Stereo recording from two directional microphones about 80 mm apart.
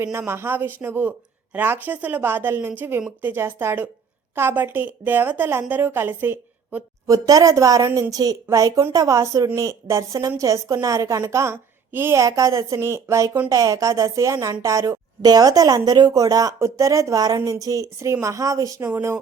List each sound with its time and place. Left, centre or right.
0.0 s a woman's voice: right
7.1 s a woman's voice: right
12.2 s a woman's voice: right